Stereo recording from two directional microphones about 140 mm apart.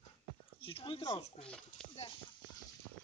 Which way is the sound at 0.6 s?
40° left (ahead or behind).